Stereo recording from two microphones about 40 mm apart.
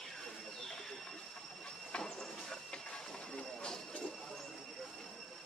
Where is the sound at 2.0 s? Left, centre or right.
Centre.